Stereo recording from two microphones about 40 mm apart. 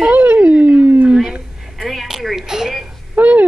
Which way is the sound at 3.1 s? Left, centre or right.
Right.